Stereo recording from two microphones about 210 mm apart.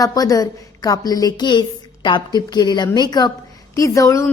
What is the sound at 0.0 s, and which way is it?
A woman's voice, 15° left (ahead or behind).